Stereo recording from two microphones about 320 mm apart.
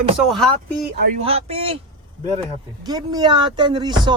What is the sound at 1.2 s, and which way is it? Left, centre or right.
Speech, centre.